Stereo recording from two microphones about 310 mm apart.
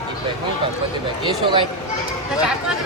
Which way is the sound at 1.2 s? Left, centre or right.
Centre.